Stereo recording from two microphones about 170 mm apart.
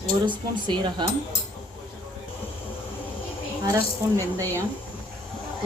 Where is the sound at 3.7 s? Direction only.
20° right (ahead or behind).